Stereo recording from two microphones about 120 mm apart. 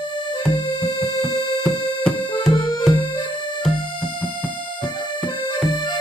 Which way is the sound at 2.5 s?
35° left (ahead or behind).